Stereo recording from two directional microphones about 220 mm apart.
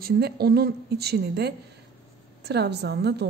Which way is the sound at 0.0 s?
45° right (ahead or behind).